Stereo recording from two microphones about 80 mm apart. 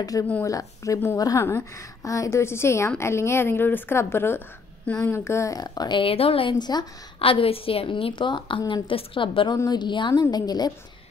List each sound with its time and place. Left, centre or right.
0.0 s a woman's voice: left
4.8 s speech: centre
5.1 s a woman's voice: left
5.6 s a woman's voice: left
5.9 s a woman's voice: left
7.9 s a woman's voice: left
9.7 s a woman's voice: left
10.3 s a woman's voice: left